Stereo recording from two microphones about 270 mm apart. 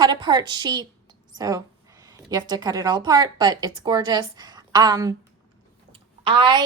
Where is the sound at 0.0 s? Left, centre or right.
Centre.